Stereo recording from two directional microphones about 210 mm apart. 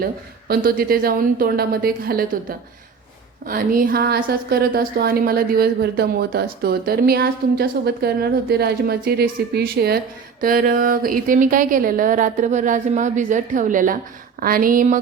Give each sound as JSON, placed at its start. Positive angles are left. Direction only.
{"t": 0.0, "sound": "a woman's voice", "side_deg": -45}